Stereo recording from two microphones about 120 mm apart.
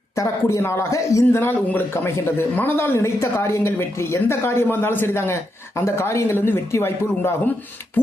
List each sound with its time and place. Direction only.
0.2 s speech: 25° left (ahead or behind)